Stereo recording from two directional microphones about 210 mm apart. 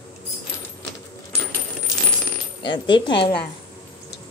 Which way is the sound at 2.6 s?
20° left (ahead or behind).